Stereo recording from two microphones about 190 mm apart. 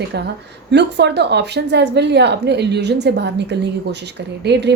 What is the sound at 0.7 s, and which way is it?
Speech, 65° right (ahead or behind).